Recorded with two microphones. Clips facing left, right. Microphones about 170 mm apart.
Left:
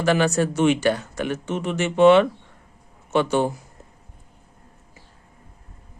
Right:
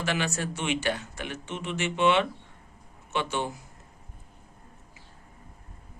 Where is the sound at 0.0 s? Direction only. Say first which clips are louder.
Left 10 dB; 45° left (ahead or behind).